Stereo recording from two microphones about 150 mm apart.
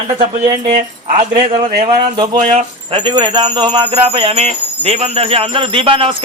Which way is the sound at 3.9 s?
40° right (ahead or behind).